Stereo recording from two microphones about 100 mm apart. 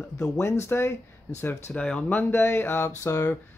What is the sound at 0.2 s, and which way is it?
Speech, 30° left (ahead or behind).